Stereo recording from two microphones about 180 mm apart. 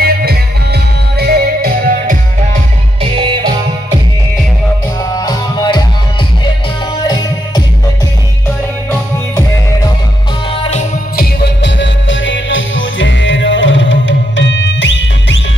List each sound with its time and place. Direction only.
0.0 s music: 60° right (ahead or behind)
3.0 s music: 30° right (ahead or behind)
5.1 s music: 20° left (ahead or behind)
10.6 s music: 40° left (ahead or behind)
11.1 s music: 65° left (ahead or behind); by 15.4 s 90° left